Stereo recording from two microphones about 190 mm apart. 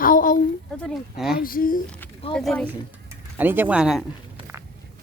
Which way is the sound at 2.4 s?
5° left (ahead or behind).